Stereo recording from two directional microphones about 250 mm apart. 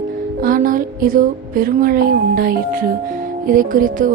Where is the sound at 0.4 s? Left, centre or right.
Right.